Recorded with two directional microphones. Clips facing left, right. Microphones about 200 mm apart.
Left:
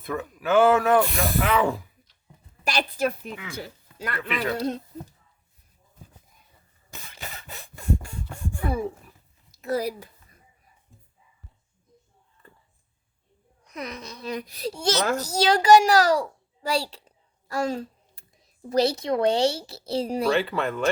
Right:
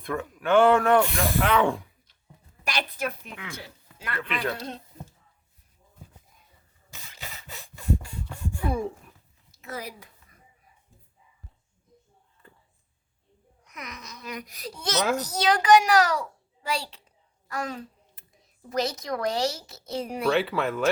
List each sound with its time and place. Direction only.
0.0 s speech: 5° left (ahead or behind)
2.6 s a child's voice: 30° left (ahead or behind)
4.2 s speech: centre (ahead or behind)
8.0 s a sound: 50° left (ahead or behind)
8.7 s speech: 5° left (ahead or behind)
9.5 s a woman's voice: 35° left (ahead or behind)
13.7 s a child's voice: 30° left (ahead or behind)
14.9 s speech: centre (ahead or behind)
15.3 s a child's voice: 30° left (ahead or behind)
17.5 s a sound: 30° left (ahead or behind)
18.7 s a child's voice: 30° left (ahead or behind)
20.3 s speech: centre (ahead or behind)